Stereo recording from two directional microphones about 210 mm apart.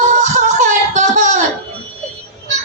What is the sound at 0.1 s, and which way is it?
Music, 35° right (ahead or behind).